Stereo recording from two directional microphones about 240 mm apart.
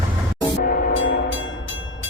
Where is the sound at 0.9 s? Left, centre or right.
Left.